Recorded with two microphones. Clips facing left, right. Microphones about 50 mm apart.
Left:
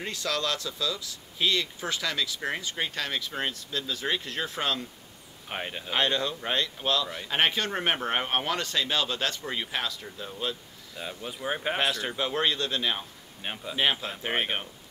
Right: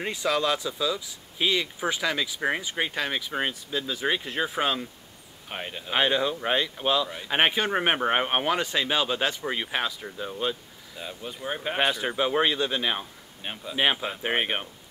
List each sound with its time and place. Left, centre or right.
0.0 s speech: centre
5.5 s speech: centre
5.9 s speech: centre
11.0 s speech: centre
11.8 s speech: centre
13.4 s speech: centre
13.7 s speech: centre